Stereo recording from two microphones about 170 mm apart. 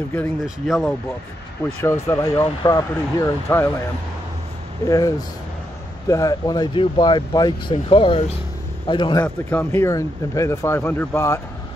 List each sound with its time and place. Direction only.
0.7 s speech: centre (ahead or behind)
1.8 s speech: 15° left (ahead or behind)
4.8 s speech: 20° left (ahead or behind)
9.2 s speech: 10° left (ahead or behind)